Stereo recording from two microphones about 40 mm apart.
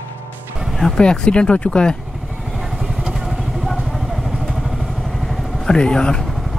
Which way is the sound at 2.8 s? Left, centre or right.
Centre.